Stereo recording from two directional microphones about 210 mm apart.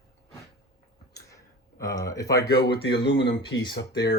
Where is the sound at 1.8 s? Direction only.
15° left (ahead or behind).